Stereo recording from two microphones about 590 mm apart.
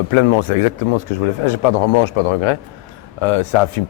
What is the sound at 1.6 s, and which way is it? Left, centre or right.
A man's voice, left.